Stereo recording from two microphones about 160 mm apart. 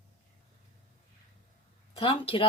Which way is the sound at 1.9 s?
35° left (ahead or behind).